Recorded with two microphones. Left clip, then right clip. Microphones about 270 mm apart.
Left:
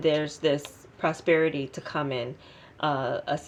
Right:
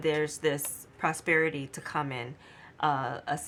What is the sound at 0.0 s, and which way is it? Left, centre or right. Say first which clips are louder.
Speech: left 3 dB; right.